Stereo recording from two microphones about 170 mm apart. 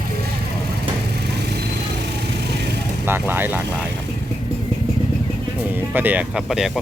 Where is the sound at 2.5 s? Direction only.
80° right.